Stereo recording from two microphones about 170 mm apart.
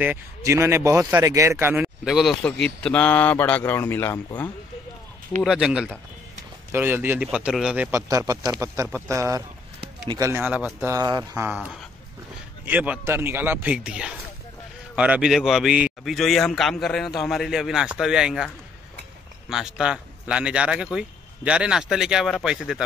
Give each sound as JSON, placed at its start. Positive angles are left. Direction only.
{"t": 0.0, "sound": "speech", "side_deg": -15}
{"t": 2.0, "sound": "a man's voice", "side_deg": 0}
{"t": 5.4, "sound": "a man's voice", "side_deg": 0}
{"t": 8.1, "sound": "speech", "side_deg": -20}
{"t": 11.4, "sound": "a man's voice", "side_deg": -10}
{"t": 19.5, "sound": "a man's voice", "side_deg": -5}